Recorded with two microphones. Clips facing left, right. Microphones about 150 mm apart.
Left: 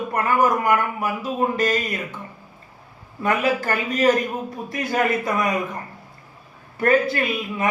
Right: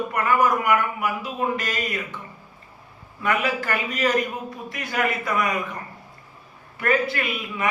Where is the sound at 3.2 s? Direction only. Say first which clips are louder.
Left 3 dB; 40° left (ahead or behind).